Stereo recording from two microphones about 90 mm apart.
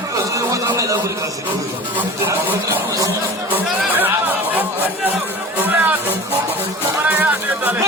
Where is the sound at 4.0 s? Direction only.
20° right (ahead or behind).